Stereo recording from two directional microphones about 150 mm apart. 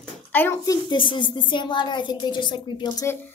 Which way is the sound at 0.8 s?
35° left (ahead or behind).